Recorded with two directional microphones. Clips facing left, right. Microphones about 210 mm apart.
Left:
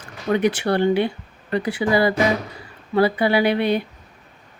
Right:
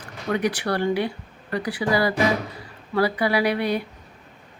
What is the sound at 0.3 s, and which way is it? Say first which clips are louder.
Speech: left 5 dB; 25° left (ahead or behind).